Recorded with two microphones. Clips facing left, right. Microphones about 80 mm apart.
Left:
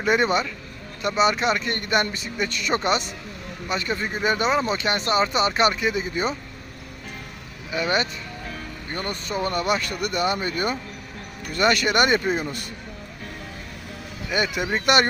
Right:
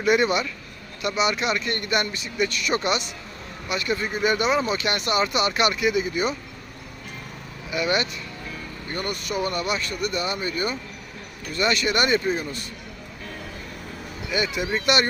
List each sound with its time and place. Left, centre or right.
0.0 s speech: left
7.7 s speech: left
9.6 s speech: left
14.3 s speech: left